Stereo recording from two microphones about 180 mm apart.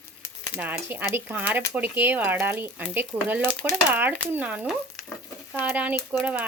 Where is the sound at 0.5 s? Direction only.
10° right (ahead or behind).